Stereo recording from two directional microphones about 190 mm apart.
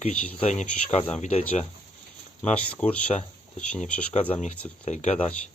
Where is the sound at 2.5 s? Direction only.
5° left (ahead or behind).